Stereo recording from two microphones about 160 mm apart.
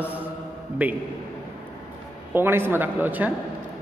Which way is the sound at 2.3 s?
15° right (ahead or behind).